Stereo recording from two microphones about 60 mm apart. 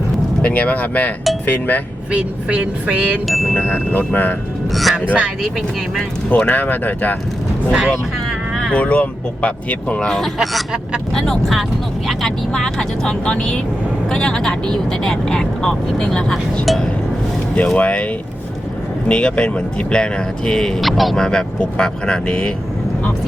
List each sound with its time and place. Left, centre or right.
0.4 s speech: left
2.0 s speech: centre
3.2 s speech: centre
3.5 s speech: left
4.7 s speech: centre
6.0 s speech: centre
7.7 s speech: centre
8.3 s vehicle: centre
8.7 s speech: left
10.3 s speech: centre
11.1 s speech: centre
17.7 s speech: centre
21.8 s speech: centre